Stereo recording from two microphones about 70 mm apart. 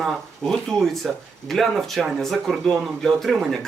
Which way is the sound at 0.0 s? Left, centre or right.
Centre.